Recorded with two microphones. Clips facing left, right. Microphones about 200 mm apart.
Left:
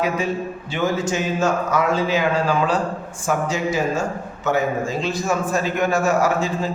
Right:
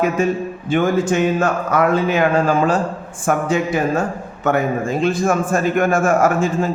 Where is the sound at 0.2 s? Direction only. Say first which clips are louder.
Right 5 dB; 50° right (ahead or behind).